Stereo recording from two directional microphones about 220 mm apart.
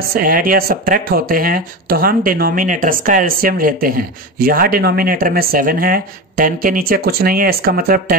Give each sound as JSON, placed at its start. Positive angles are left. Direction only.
{"t": 0.1, "sound": "speech", "side_deg": -40}